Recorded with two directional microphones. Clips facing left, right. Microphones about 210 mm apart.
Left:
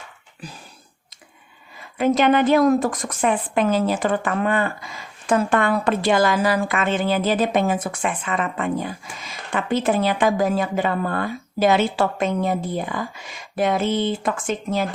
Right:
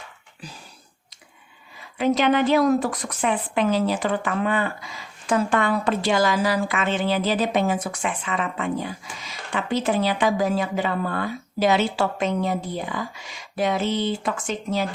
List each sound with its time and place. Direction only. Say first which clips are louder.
2.0 s a woman's voice: left 2 dB; 50° left (ahead or behind)